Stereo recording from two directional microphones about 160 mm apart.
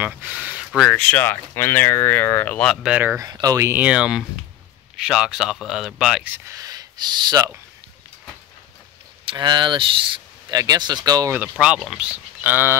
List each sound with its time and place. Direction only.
0.0 s speech: 10° right (ahead or behind); by 2.8 s 5° left (ahead or behind)
2.8 s speech: 10° right (ahead or behind)
3.2 s speech: 25° right (ahead or behind)
9.3 s speech: 30° right (ahead or behind)
11.3 s speech: 5° right (ahead or behind)